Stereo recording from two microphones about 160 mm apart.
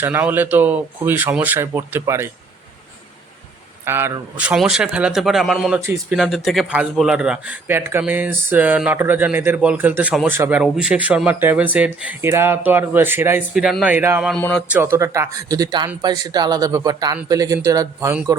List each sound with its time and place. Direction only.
0.0 s speech: 15° right (ahead or behind)
3.8 s speech: 15° right (ahead or behind)
5.8 s speech: 15° right (ahead or behind)
6.1 s speech: centre (ahead or behind)
13.6 s speech: 5° right (ahead or behind)
14.2 s speech: centre (ahead or behind)
14.7 s speech: 15° right (ahead or behind)